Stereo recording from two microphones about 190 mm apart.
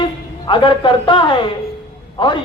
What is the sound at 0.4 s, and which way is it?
Speech, 25° left (ahead or behind).